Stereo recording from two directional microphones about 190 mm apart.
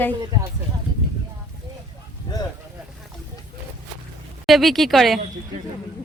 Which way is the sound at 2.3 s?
20° left (ahead or behind).